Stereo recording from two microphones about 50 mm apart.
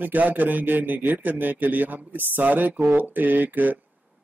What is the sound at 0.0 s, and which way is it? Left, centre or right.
Speech, right.